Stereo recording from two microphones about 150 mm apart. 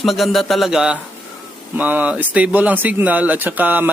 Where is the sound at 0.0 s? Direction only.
Centre (ahead or behind).